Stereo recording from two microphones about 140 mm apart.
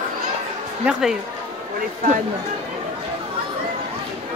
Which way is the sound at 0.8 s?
5° right (ahead or behind).